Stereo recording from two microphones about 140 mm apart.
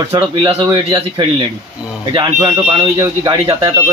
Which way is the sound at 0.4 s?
35° right (ahead or behind).